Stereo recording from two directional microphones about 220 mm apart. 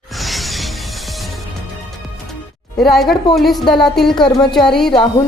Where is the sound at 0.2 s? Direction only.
Centre (ahead or behind).